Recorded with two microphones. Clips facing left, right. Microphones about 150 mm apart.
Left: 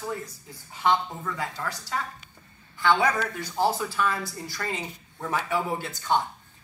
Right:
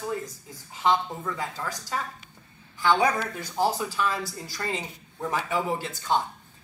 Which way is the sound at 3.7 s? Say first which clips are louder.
Even; 15° right (ahead or behind).